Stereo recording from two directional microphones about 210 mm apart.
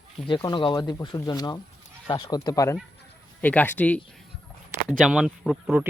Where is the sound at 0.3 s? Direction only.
20° left (ahead or behind).